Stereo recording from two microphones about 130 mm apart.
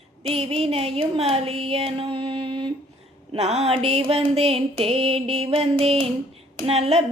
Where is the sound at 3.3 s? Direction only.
55° right (ahead or behind).